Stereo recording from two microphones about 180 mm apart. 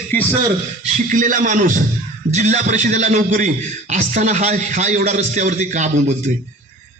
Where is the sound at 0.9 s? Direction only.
45° right (ahead or behind).